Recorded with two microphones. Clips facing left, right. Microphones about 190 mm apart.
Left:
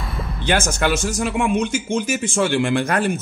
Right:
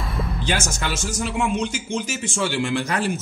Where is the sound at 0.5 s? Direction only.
60° left (ahead or behind).